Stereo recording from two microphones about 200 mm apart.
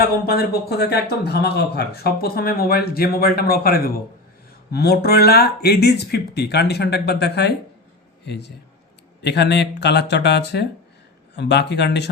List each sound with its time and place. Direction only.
0.3 s a man's voice: 50° left (ahead or behind)